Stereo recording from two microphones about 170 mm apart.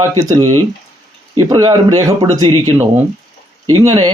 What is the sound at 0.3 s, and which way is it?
A man's voice, 20° right (ahead or behind).